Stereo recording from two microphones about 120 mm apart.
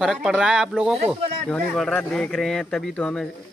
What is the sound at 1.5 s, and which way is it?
Speech, 10° left (ahead or behind).